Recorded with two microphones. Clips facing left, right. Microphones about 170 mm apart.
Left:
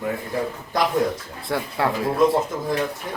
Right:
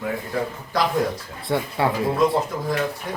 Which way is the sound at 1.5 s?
Centre (ahead or behind).